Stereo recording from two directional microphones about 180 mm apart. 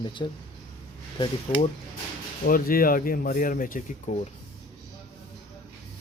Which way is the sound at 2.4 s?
55° left (ahead or behind).